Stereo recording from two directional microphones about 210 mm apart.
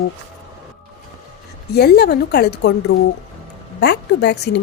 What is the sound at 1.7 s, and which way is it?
Speech, 50° left (ahead or behind).